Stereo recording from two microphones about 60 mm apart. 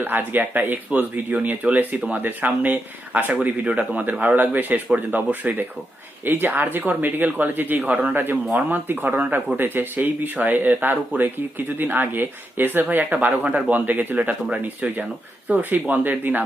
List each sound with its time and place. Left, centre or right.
0.0 s speech: right